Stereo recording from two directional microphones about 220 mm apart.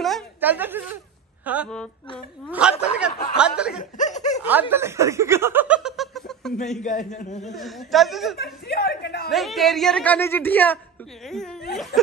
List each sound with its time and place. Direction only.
0.0 s a sound: 5° right (ahead or behind)
1.4 s a woman's voice: 5° right (ahead or behind)
2.8 s a woman's voice: 5° right (ahead or behind)
4.0 s snicker: 35° left (ahead or behind)
4.4 s snicker: 10° right (ahead or behind)
6.8 s a man's voice: 35° left (ahead or behind)
7.5 s a woman's voice: centre (ahead or behind)
8.4 s speech: 45° left (ahead or behind)
9.3 s a woman's voice: centre (ahead or behind)